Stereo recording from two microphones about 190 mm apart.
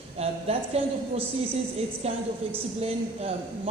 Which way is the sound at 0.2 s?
35° right (ahead or behind).